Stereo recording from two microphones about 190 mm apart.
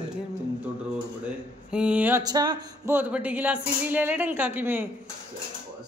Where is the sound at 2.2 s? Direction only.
20° right (ahead or behind).